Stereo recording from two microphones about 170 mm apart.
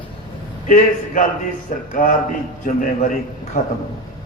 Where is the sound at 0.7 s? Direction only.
50° left (ahead or behind).